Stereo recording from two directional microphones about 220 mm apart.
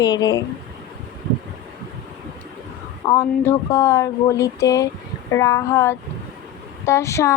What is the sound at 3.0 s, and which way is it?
A woman's voice, 15° left (ahead or behind).